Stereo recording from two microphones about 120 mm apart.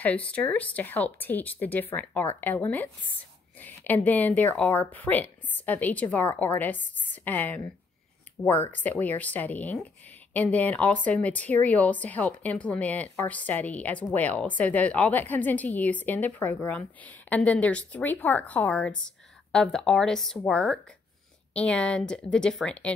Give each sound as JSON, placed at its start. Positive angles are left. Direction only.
{"t": 0.0, "sound": "a woman's voice", "side_deg": 10}
{"t": 9.0, "sound": "a woman's voice", "side_deg": 15}